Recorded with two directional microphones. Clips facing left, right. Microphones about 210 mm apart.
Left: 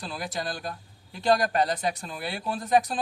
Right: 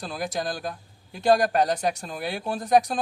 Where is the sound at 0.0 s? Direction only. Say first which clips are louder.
Right 4 dB; 45° right (ahead or behind).